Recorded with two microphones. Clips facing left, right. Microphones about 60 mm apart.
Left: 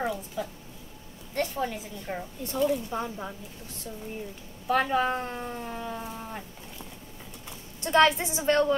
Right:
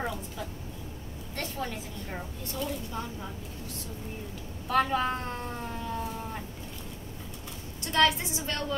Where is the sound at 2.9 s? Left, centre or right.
Left.